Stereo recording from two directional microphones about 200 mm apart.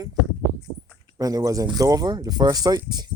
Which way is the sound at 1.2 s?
20° right (ahead or behind).